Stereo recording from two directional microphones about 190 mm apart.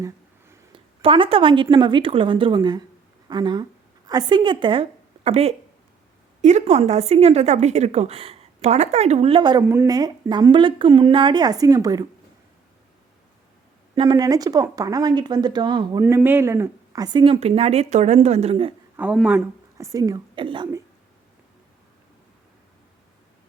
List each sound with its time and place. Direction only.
1.0 s a woman's voice: 30° right (ahead or behind)
13.9 s a woman's voice: 25° right (ahead or behind)
18.9 s speech: 5° right (ahead or behind)
19.8 s a woman's voice: 20° right (ahead or behind)